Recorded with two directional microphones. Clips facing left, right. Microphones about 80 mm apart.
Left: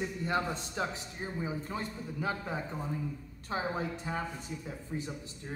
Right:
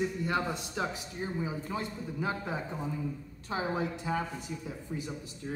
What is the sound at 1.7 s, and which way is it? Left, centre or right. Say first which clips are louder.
Speech: right 2 dB; centre.